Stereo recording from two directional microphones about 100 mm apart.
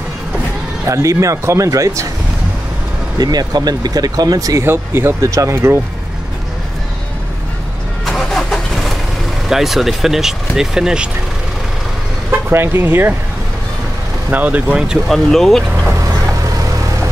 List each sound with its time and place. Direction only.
0.8 s speech: 30° right (ahead or behind)
3.2 s speech: 40° right (ahead or behind)
4.6 s speech: 25° right (ahead or behind)
8.0 s vehicle: centre (ahead or behind)
9.5 s speech: centre (ahead or behind)
12.3 s speech: 25° right (ahead or behind)
14.3 s speech: 15° right (ahead or behind); by 15.6 s 5° left (ahead or behind)